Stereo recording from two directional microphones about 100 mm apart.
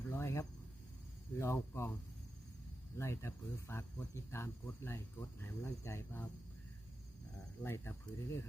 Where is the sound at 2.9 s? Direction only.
25° left (ahead or behind).